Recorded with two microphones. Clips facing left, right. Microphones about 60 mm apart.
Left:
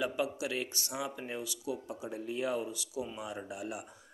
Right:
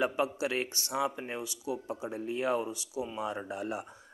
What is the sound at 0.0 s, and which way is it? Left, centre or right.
Speech, right.